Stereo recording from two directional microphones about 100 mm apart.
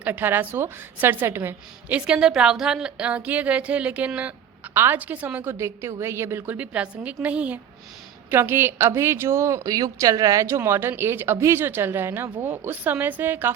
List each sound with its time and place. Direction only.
0.0 s speech: 20° right (ahead or behind)
2.0 s a woman's voice: 10° right (ahead or behind)